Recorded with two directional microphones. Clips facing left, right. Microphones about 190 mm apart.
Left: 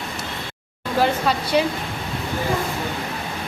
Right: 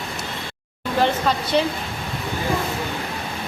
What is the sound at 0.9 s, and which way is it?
Speech, 10° left (ahead or behind).